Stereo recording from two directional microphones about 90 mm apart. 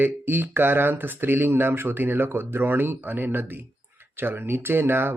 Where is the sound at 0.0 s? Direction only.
20° right (ahead or behind).